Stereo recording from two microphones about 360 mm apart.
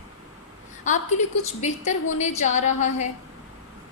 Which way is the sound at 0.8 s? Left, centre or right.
Centre.